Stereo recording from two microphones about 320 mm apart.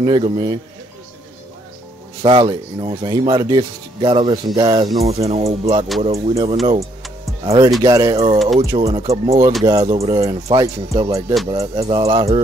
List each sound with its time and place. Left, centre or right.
0.0 s speech: centre
2.2 s speech: centre